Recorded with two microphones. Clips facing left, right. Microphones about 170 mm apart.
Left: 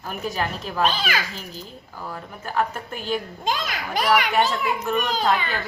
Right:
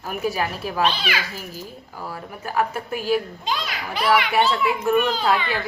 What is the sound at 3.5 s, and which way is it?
Speech, 45° left (ahead or behind).